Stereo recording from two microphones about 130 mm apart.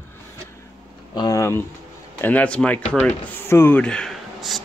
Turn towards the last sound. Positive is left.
turn(degrees=0)  # may be behind; listen again after turning